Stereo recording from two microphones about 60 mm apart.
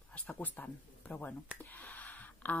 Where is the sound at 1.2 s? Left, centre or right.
Left.